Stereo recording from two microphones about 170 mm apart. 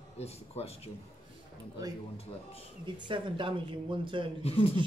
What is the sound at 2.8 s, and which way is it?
Speech, 30° right (ahead or behind).